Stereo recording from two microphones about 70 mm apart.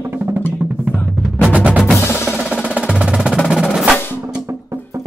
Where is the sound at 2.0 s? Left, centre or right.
Left.